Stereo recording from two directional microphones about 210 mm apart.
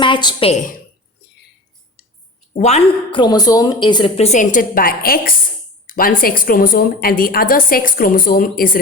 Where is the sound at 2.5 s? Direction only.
30° left (ahead or behind).